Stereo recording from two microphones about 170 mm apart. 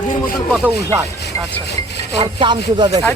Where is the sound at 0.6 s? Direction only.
15° right (ahead or behind).